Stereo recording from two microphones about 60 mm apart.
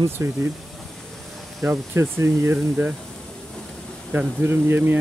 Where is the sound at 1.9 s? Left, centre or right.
Right.